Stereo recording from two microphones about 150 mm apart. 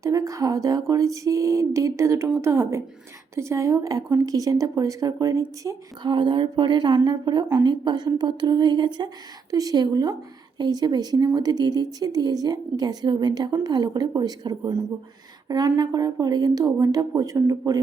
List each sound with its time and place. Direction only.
0.0 s a woman's voice: 20° right (ahead or behind)